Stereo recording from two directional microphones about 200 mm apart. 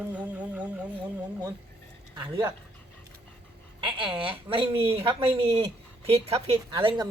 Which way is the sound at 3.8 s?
25° right (ahead or behind).